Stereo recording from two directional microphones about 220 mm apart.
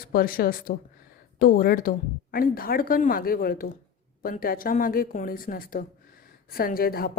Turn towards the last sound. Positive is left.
turn(degrees=45)  # may be behind; listen again after turning